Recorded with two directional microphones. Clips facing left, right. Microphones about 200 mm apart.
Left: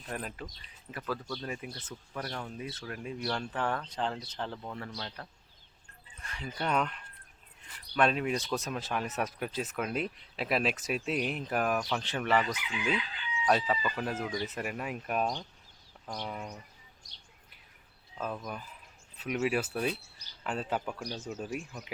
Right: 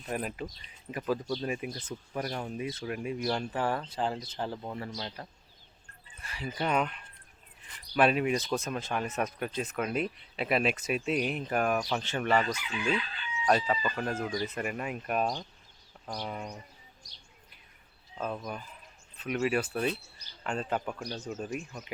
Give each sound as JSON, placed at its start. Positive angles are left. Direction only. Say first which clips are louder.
{"t": 0.1, "sound": "speech", "louder": "right 5 dB", "side_deg": -10}
{"t": 12.5, "sound": "chicken", "louder": "right 2 dB", "side_deg": 15}
{"t": 13.4, "sound": "speech", "louder": "right 1 dB", "side_deg": 0}
{"t": 18.2, "sound": "speech", "louder": "right 2 dB", "side_deg": -10}
{"t": 19.1, "sound": "speech", "louder": "right 1 dB", "side_deg": 5}